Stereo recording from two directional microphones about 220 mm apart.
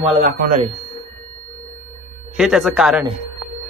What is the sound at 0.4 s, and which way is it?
Speech, 35° right (ahead or behind).